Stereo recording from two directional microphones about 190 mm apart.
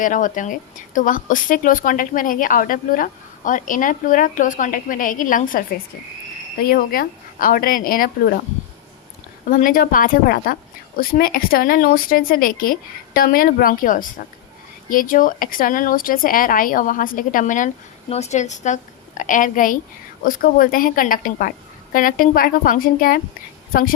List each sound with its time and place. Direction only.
0.0 s a woman's voice: 45° left (ahead or behind)
6.7 s a woman's voice: 50° left (ahead or behind)
9.5 s a woman's voice: 45° left (ahead or behind)